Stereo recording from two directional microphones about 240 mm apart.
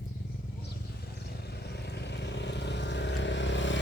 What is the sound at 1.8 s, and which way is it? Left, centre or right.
Vehicle, left.